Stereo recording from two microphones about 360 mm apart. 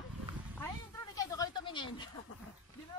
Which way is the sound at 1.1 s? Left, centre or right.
Centre.